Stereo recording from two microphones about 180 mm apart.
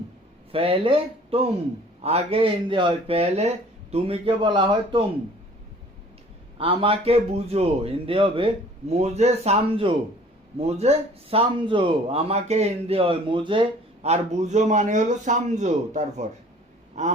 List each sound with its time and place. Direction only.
0.5 s a man's voice: 30° right (ahead or behind)
6.6 s a man's voice: 30° right (ahead or behind)